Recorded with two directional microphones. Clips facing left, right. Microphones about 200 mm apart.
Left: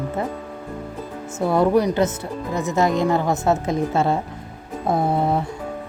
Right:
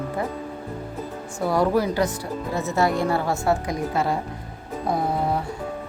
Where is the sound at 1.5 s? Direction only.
20° left (ahead or behind).